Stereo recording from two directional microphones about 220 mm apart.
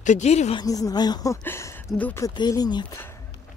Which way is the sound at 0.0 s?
30° left (ahead or behind).